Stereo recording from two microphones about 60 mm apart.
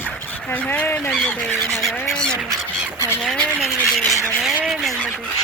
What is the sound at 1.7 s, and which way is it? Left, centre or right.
Fowl, centre.